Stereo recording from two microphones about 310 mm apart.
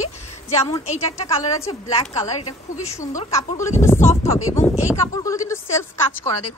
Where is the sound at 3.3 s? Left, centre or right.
Centre.